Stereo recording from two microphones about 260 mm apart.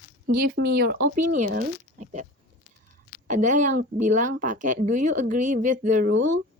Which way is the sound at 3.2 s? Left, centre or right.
Right.